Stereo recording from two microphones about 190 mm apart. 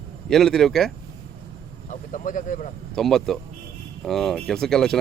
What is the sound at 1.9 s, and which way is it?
Speech, 40° left (ahead or behind).